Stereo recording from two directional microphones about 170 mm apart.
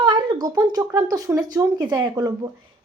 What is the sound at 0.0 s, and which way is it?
A woman's voice, 25° right (ahead or behind).